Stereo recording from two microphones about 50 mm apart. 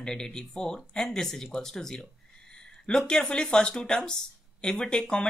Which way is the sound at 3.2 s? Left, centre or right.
Centre.